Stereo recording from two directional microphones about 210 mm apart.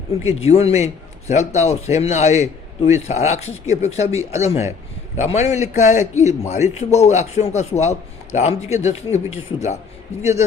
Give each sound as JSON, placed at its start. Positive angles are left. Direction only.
{"t": 0.4, "sound": "a man's voice", "side_deg": 30}